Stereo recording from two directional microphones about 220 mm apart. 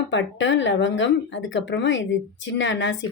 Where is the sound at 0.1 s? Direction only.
55° left (ahead or behind).